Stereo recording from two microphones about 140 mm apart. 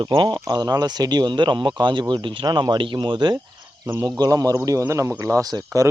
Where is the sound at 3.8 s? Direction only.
20° right (ahead or behind).